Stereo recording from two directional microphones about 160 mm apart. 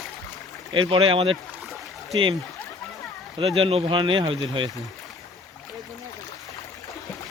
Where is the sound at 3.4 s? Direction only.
35° right (ahead or behind).